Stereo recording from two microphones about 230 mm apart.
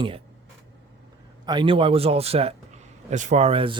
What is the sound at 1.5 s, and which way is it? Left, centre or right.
Speech, right.